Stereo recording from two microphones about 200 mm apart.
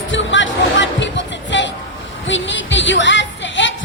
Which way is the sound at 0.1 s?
65° left (ahead or behind).